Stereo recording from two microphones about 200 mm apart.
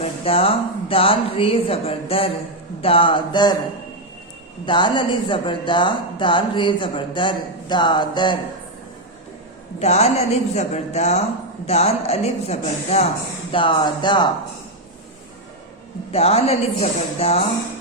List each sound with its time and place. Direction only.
0.0 s speech: 30° left (ahead or behind)
4.6 s speech: 25° left (ahead or behind)
9.8 s a woman's voice: 30° left (ahead or behind)
16.1 s a woman's voice: 30° left (ahead or behind)